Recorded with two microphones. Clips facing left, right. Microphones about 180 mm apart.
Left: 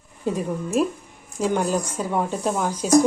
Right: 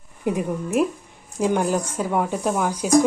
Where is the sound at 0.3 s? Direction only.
15° right (ahead or behind).